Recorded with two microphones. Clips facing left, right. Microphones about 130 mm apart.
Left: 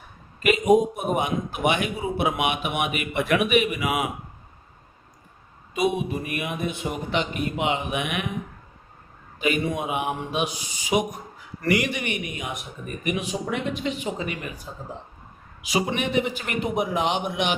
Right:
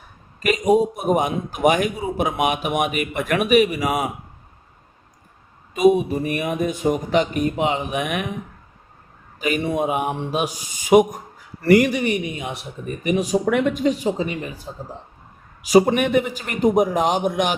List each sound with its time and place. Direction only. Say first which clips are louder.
0.4 s a man's voice: right 1 dB; 35° right (ahead or behind)
5.7 s a man's voice: right 8 dB; 40° right (ahead or behind)
9.4 s a man's voice: right 3 dB; 40° right (ahead or behind)
13.4 s a man's voice: right 8 dB; 60° right (ahead or behind); by 14.7 s 30° right (ahead or behind)
15.6 s a man's voice: right 10 dB; 40° right (ahead or behind)